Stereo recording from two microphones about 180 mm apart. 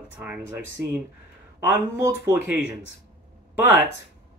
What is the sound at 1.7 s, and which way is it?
Speech, 15° right (ahead or behind).